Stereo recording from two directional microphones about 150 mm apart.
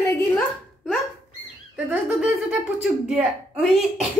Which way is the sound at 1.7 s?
5° right (ahead or behind).